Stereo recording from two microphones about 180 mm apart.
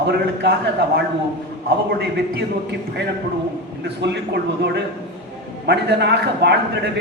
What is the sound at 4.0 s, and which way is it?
A man's voice, 70° right (ahead or behind).